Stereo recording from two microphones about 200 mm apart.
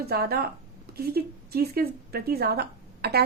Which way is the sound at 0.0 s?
50° right (ahead or behind).